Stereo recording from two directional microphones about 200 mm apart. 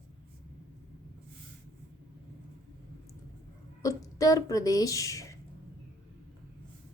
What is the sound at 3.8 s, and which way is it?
A woman's voice, 15° left (ahead or behind).